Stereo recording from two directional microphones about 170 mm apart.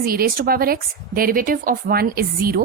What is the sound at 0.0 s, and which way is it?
A woman's voice, 60° right (ahead or behind).